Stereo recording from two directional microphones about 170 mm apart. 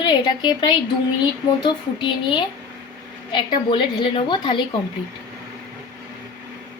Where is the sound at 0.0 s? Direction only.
25° left (ahead or behind).